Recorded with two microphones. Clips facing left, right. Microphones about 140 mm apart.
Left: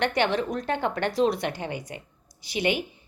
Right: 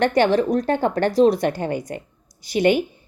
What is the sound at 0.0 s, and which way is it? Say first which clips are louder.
A woman's voice: right 7 dB; 40° right (ahead or behind).